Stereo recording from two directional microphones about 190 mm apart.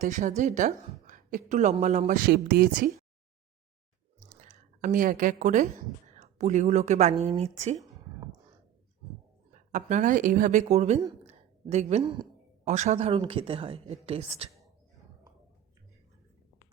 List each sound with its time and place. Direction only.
0.0 s a woman's voice: 40° right (ahead or behind)
4.4 s a woman's voice: 40° right (ahead or behind)
9.5 s a woman's voice: 40° right (ahead or behind)